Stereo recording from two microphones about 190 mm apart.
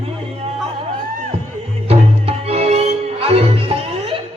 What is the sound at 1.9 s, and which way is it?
Music, 30° right (ahead or behind).